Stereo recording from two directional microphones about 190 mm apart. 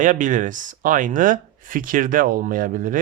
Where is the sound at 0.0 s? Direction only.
40° right (ahead or behind).